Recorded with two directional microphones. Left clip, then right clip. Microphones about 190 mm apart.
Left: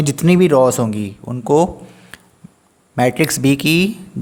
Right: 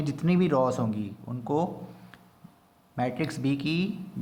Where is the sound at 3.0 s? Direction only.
50° left (ahead or behind).